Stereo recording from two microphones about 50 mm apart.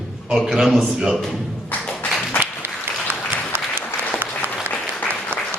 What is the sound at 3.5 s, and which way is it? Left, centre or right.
Applause, right.